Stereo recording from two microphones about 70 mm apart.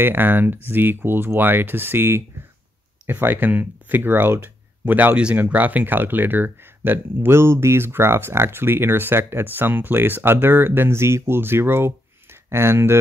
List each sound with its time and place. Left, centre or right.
0.0 s speech: right